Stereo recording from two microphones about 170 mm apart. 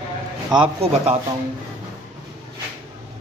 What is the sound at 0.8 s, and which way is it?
Speech, 35° right (ahead or behind).